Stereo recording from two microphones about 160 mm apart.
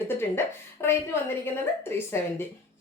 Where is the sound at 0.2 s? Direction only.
15° left (ahead or behind).